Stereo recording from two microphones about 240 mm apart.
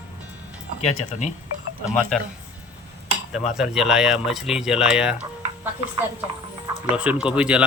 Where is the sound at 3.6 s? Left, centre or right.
Centre.